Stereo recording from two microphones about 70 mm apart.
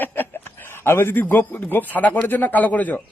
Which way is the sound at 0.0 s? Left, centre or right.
Left.